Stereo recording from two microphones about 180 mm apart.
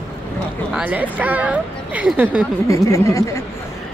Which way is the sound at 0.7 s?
10° right (ahead or behind).